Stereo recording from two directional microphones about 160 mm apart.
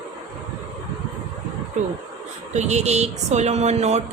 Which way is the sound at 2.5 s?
45° right (ahead or behind).